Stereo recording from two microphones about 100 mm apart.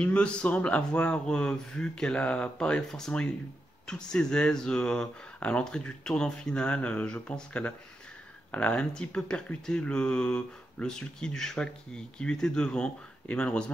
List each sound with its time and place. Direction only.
0.0 s speech: 10° left (ahead or behind)